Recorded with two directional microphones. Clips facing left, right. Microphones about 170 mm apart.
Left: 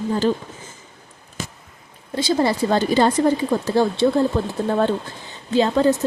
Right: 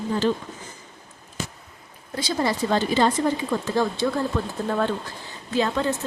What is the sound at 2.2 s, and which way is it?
Speech, 30° left (ahead or behind).